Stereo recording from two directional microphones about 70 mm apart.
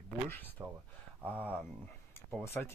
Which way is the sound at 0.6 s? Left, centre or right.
Right.